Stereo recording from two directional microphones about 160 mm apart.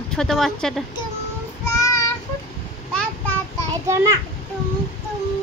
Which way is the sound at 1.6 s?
20° left (ahead or behind).